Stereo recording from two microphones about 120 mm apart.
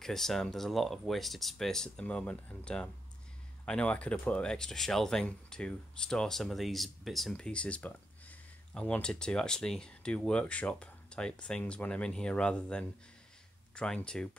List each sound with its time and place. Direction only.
0.0 s speech: 5° left (ahead or behind)